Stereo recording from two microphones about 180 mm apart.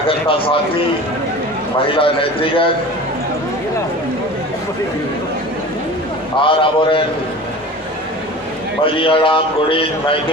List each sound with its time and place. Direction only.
0.1 s a man's voice: 30° left (ahead or behind)
6.3 s a man's voice: 30° left (ahead or behind)
8.8 s a man's voice: 30° left (ahead or behind)